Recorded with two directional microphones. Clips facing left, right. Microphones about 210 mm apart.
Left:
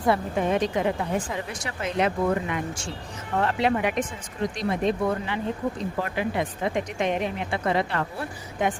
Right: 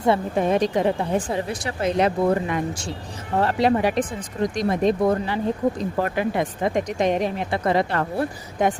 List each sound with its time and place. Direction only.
0.0 s a woman's voice: 30° right (ahead or behind)